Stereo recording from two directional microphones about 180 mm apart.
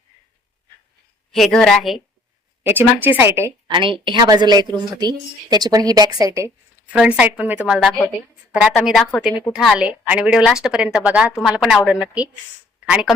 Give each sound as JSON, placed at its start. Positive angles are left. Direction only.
{"t": 1.3, "sound": "a woman's voice", "side_deg": 5}
{"t": 2.6, "sound": "a woman's voice", "side_deg": -10}
{"t": 3.7, "sound": "a woman's voice", "side_deg": -30}